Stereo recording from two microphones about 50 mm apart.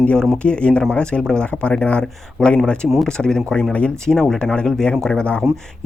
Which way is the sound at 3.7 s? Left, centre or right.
Left.